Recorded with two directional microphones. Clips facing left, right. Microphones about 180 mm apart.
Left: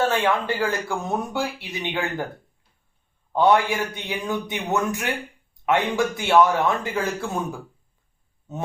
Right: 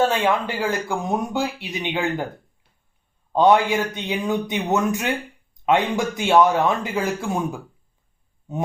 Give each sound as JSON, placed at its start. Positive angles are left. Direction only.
{"t": 0.0, "sound": "speech", "side_deg": -15}
{"t": 3.3, "sound": "speech", "side_deg": -20}